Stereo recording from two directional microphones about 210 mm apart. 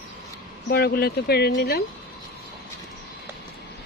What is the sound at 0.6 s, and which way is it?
Speech, 50° left (ahead or behind).